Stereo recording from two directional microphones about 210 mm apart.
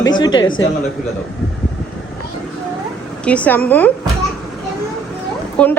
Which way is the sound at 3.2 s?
5° left (ahead or behind).